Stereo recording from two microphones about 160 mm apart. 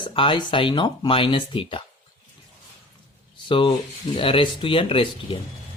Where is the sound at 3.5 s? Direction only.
35° left (ahead or behind).